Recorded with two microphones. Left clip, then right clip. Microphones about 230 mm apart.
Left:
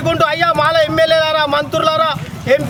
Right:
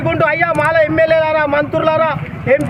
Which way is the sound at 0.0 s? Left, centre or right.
Centre.